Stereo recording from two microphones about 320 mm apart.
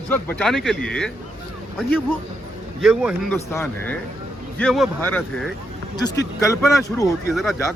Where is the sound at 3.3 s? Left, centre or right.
Centre.